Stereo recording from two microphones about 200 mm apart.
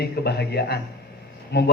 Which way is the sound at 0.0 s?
55° left (ahead or behind).